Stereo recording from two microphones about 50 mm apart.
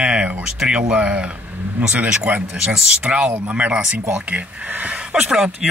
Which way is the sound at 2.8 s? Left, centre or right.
Centre.